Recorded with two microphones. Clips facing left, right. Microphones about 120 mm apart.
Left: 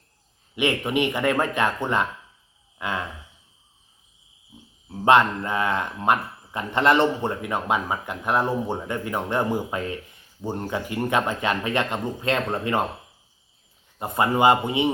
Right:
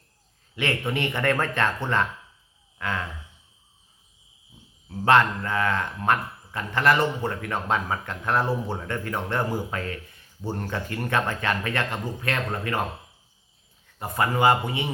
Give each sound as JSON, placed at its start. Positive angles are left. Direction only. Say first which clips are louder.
{"t": 0.5, "sound": "speech", "louder": "left 4 dB", "side_deg": 15}
{"t": 2.7, "sound": "a sound", "louder": "left 1 dB", "side_deg": 15}
{"t": 4.9, "sound": "speech", "louder": "left 2 dB", "side_deg": 20}
{"t": 14.0, "sound": "speech", "louder": "left 3 dB", "side_deg": 20}